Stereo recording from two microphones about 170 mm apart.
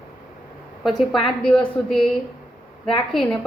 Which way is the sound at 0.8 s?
Centre (ahead or behind).